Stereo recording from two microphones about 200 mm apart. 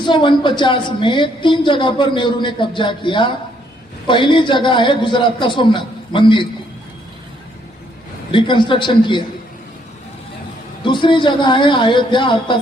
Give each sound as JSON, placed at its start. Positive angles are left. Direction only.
{"t": 0.0, "sound": "a woman's voice", "side_deg": 25}
{"t": 8.3, "sound": "a woman's voice", "side_deg": 25}
{"t": 10.8, "sound": "a woman's voice", "side_deg": 25}